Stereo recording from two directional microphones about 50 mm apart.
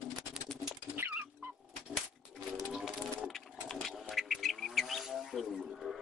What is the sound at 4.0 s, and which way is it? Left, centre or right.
Wild animals, centre.